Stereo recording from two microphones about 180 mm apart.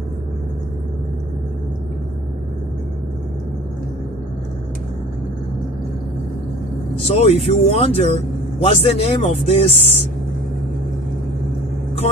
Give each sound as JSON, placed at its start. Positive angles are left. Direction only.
{"t": 7.1, "sound": "speech", "side_deg": 35}